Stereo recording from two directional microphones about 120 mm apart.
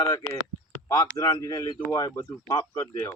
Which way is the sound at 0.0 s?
30° left (ahead or behind).